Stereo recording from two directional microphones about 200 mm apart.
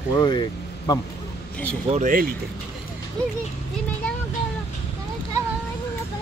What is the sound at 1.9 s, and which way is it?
Speech, 40° right (ahead or behind).